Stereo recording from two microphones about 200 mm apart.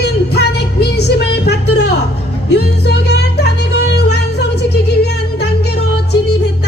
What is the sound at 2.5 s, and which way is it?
Music, 55° left (ahead or behind).